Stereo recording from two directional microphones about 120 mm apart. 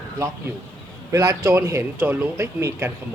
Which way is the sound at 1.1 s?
25° right (ahead or behind).